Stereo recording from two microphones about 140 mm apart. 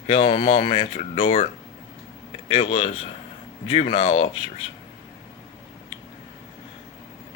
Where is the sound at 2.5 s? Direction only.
50° left (ahead or behind).